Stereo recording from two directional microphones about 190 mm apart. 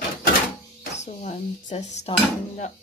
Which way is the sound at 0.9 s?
35° left (ahead or behind).